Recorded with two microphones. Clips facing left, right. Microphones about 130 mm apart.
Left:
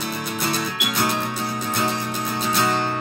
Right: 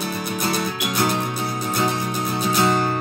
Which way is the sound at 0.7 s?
20° right (ahead or behind).